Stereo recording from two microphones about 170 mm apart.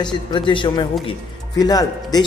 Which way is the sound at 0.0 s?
30° left (ahead or behind).